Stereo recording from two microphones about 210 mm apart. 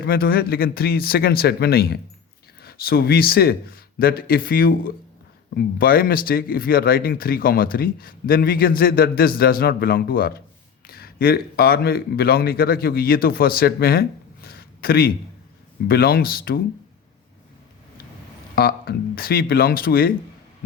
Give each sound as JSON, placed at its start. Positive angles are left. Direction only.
{"t": 0.0, "sound": "speech", "side_deg": 45}
{"t": 18.5, "sound": "speech", "side_deg": 45}